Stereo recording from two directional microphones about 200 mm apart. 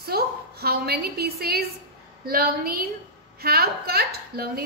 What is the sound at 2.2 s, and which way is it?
A woman's voice, 50° right (ahead or behind).